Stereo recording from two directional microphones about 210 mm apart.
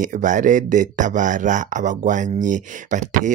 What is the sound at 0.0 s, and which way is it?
Speech, 40° right (ahead or behind).